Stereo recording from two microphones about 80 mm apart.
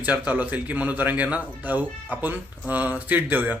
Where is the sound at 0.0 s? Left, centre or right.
Right.